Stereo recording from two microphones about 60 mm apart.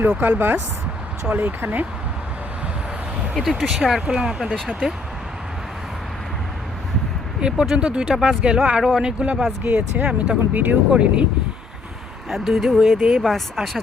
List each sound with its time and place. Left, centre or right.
0.0 s speech: right
3.3 s speech: centre
7.4 s speech: centre
10.5 s speech: right
12.3 s speech: centre